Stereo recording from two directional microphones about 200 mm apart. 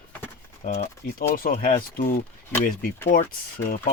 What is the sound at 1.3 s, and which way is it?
Speech, 45° left (ahead or behind).